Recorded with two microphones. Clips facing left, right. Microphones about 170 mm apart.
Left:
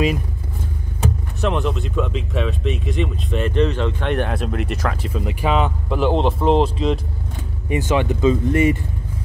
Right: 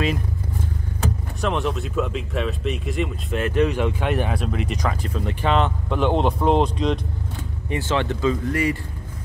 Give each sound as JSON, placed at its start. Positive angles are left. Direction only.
{"t": 1.4, "sound": "speech", "side_deg": 0}
{"t": 7.7, "sound": "speech", "side_deg": 15}